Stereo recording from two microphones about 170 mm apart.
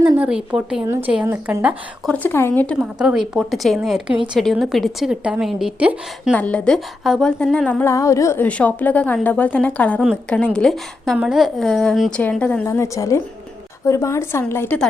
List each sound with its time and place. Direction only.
0.0 s a woman's voice: 5° right (ahead or behind)
2.0 s speech: 10° left (ahead or behind)
2.8 s a woman's voice: 5° right (ahead or behind)
6.3 s speech: 5° left (ahead or behind)
10.0 s a woman's voice: 5° right (ahead or behind); by 14.8 s 15° left (ahead or behind)